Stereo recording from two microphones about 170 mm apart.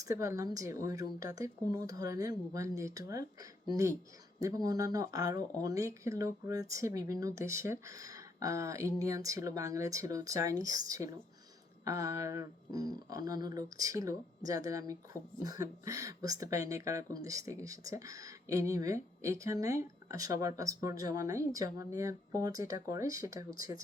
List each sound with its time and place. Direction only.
0.0 s speech: 20° right (ahead or behind)
4.4 s speech: 20° right (ahead or behind)